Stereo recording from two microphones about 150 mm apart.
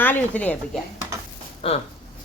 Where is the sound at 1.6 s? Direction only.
40° left (ahead or behind).